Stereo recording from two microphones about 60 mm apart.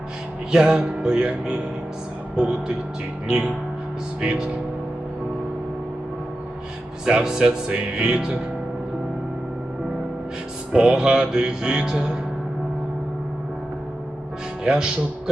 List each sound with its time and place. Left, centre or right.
0.5 s music: centre
3.2 s speech: centre
4.2 s music: centre
7.0 s music: centre
10.7 s music: centre
14.6 s speech: centre